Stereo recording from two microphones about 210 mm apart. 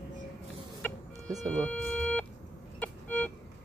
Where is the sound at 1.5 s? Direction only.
5° left (ahead or behind).